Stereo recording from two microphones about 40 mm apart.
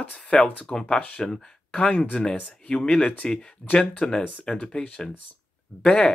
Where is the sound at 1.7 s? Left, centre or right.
Left.